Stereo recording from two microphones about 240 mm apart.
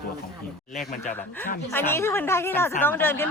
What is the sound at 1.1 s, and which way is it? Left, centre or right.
Speech, centre.